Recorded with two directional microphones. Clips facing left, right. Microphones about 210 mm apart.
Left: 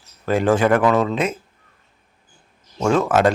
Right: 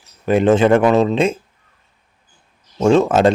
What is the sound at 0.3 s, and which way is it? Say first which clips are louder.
Speech: right 4 dB; 20° right (ahead or behind).